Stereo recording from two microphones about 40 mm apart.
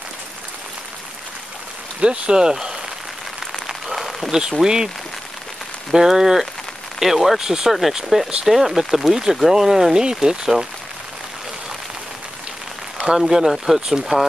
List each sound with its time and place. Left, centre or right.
2.0 s speech: right
3.3 s a sound: centre
4.4 s speech: centre
13.2 s speech: centre